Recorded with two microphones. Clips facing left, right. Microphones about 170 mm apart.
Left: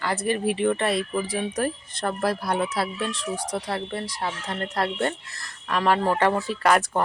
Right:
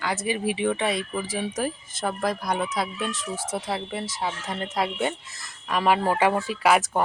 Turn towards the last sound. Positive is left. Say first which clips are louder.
# even
turn(degrees=-5)  # may be behind; listen again after turning